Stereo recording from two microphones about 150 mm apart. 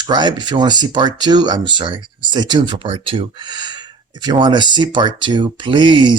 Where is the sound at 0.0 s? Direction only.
30° right (ahead or behind).